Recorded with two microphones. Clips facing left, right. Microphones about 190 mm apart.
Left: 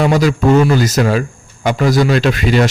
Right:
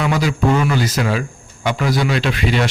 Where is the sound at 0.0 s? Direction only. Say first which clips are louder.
Left 5 dB; 45° left (ahead or behind).